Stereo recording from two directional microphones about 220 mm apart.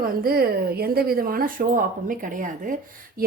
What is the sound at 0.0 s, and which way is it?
A woman's voice, 40° right (ahead or behind).